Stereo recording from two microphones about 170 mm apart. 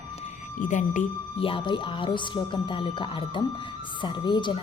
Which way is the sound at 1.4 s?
30° left (ahead or behind).